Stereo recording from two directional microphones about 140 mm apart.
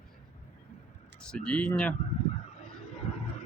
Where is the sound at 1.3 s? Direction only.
5° left (ahead or behind).